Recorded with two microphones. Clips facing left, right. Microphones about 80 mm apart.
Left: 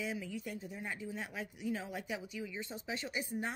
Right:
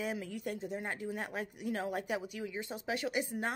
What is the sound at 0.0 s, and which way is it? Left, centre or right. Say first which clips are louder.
Speech: right 3 dB; right.